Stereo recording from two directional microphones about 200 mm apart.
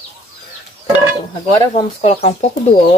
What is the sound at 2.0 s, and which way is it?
Speech, 30° left (ahead or behind).